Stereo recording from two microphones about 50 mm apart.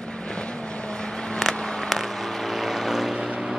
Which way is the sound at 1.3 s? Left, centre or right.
Centre.